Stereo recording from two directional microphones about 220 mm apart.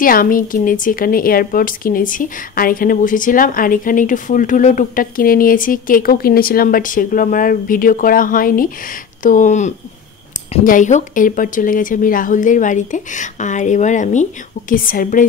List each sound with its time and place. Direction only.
0.0 s a woman's voice: 40° left (ahead or behind)